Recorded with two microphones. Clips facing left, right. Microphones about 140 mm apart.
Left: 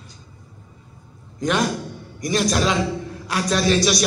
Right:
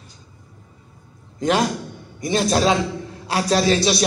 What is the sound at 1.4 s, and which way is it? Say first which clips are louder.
A man's voice: right 2 dB; 30° right (ahead or behind).